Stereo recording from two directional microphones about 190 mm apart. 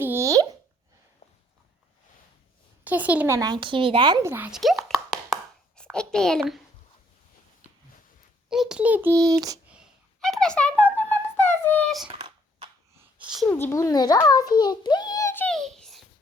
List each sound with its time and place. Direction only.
0.0 s plop: 15° right (ahead or behind)
2.8 s speech: 10° right (ahead or behind)
8.4 s a child's voice: centre (ahead or behind); by 9.6 s 20° right (ahead or behind)
9.6 s a sound: 5° right (ahead or behind)
12.0 s a sound: 25° right (ahead or behind)
13.0 s sneeze: 5° right (ahead or behind)
13.5 s a child's voice: 10° left (ahead or behind)